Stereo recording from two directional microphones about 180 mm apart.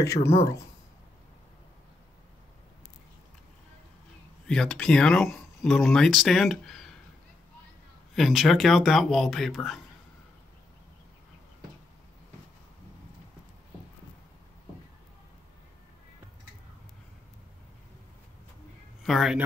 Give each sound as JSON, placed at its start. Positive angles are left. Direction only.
{"t": 0.0, "sound": "speech", "side_deg": 15}
{"t": 4.5, "sound": "speech", "side_deg": 5}
{"t": 8.1, "sound": "speech", "side_deg": 0}
{"t": 19.0, "sound": "speech", "side_deg": 0}